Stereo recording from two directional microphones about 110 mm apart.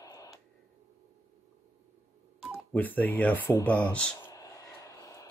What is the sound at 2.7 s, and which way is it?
Speech, 15° left (ahead or behind).